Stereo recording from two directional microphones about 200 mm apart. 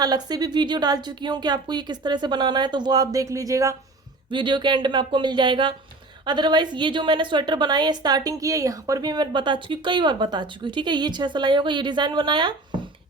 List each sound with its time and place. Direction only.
0.0 s a woman's voice: 20° right (ahead or behind)